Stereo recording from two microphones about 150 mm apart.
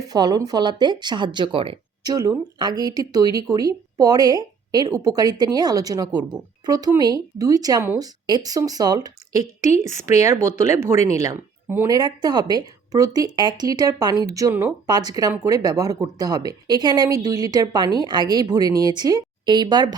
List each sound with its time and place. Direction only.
0.1 s speech: 25° right (ahead or behind)